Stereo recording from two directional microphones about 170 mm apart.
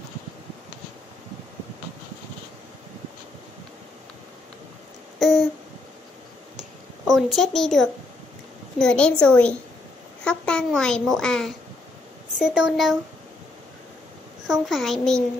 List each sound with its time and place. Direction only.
7.1 s a woman's voice: centre (ahead or behind)
14.5 s speech: centre (ahead or behind)